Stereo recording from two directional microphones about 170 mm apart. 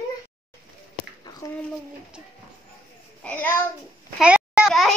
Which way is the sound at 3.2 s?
10° left (ahead or behind).